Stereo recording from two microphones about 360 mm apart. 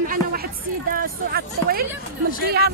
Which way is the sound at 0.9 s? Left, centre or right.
Right.